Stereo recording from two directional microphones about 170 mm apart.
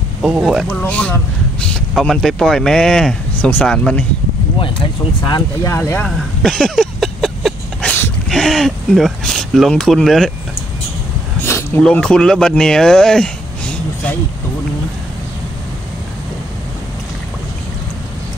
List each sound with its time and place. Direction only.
0.2 s speech: 5° right (ahead or behind)
4.6 s speech: 25° left (ahead or behind)
5.8 s speech: 10° left (ahead or behind)
11.4 s a sound: 15° left (ahead or behind)
11.8 s speech: 5° left (ahead or behind)